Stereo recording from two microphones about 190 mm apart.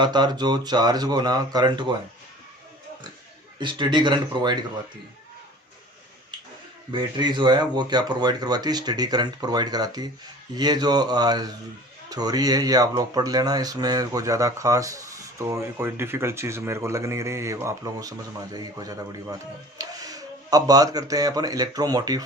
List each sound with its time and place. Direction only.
0.0 s speech: 20° right (ahead or behind)
3.6 s speech: 25° right (ahead or behind)
6.9 s speech: 25° right (ahead or behind)